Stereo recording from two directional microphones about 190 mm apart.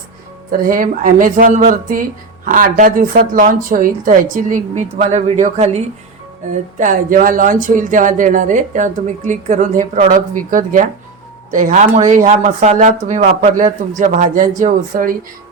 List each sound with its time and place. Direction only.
0.5 s speech: 45° right (ahead or behind)